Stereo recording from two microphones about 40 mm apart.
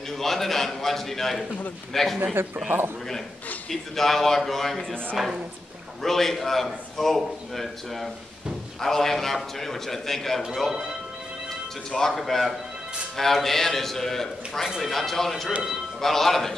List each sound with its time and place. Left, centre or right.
0.2 s a man's voice: centre
2.4 s speech: right
3.7 s a man's voice: centre
5.2 s a man's voice: centre
6.0 s a man's voice: centre
10.7 s speech: centre
12.0 s a man's voice: centre